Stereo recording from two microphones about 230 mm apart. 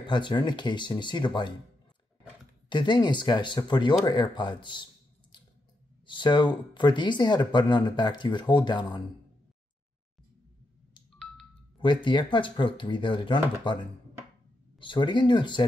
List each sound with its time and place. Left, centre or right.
0.0 s speech: centre
2.7 s speech: centre
6.0 s speech: centre
11.8 s speech: left
14.8 s speech: left